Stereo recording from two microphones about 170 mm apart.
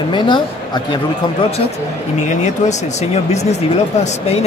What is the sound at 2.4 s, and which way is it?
Speech, 45° left (ahead or behind).